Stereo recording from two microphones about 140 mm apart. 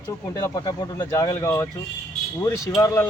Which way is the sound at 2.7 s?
25° left (ahead or behind).